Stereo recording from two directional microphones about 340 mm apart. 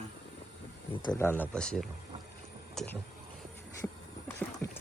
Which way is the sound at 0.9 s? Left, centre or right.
Centre.